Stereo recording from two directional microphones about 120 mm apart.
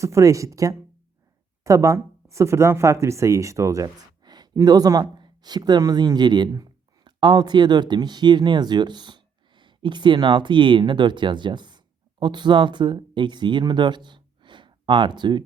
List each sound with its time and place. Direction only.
0.0 s speech: 25° right (ahead or behind)